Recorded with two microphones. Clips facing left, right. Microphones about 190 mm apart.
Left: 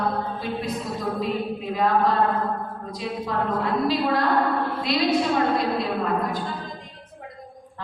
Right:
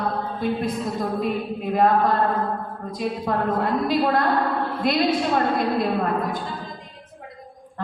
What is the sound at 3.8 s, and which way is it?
Speech, 50° right (ahead or behind).